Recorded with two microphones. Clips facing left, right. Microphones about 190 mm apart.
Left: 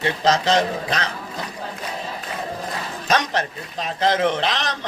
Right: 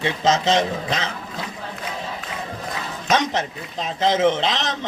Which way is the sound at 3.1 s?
20° right (ahead or behind).